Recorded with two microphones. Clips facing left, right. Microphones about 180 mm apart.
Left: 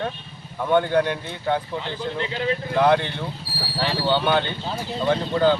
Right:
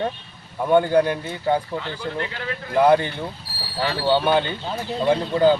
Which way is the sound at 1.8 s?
20° left (ahead or behind).